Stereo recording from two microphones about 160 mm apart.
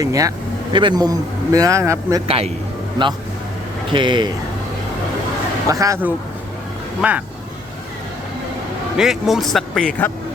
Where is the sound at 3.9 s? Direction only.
30° right (ahead or behind).